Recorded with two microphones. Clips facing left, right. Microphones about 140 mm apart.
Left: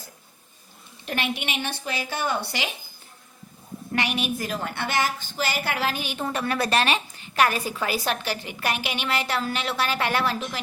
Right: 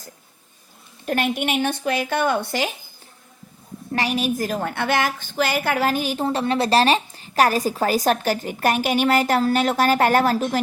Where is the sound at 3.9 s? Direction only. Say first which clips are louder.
Right 4 dB; 35° right (ahead or behind).